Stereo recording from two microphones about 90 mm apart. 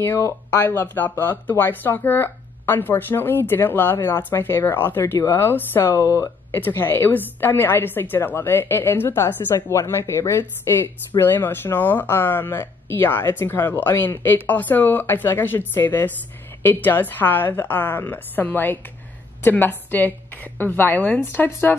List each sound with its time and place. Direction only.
0.0 s speech: 25° left (ahead or behind)